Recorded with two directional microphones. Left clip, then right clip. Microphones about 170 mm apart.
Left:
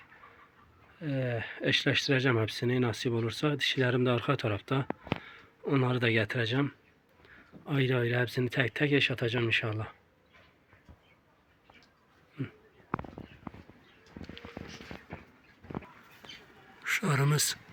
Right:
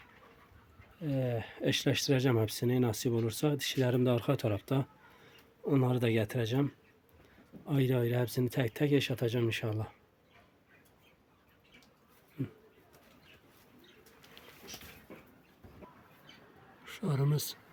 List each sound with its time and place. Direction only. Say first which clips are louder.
0.9 s speech: left 1 dB; 20° right (ahead or behind)
16.8 s speech: left 8 dB; centre (ahead or behind)